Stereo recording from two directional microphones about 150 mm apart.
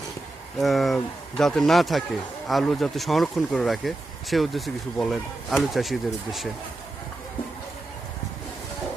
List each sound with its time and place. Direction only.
0.6 s speech: centre (ahead or behind)